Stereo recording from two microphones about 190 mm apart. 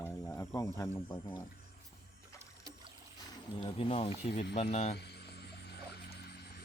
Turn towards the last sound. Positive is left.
turn(degrees=60)  # may be behind; listen again after turning